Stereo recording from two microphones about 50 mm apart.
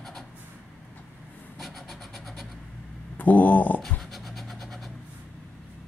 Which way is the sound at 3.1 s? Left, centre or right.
Left.